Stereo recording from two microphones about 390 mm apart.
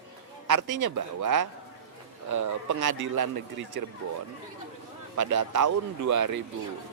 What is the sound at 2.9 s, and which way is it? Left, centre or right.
Speech, right.